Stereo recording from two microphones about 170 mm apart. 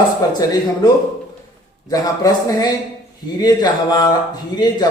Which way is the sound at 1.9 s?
20° left (ahead or behind).